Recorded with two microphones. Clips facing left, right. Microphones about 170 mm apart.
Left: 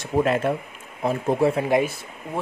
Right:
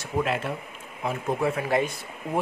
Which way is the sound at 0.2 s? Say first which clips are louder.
Left 6 dB; 45° left (ahead or behind).